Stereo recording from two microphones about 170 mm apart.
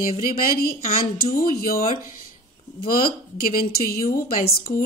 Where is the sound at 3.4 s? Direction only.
60° left (ahead or behind).